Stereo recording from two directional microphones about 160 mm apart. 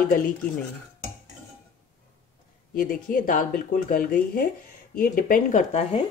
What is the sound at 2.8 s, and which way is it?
Speech, 60° left (ahead or behind).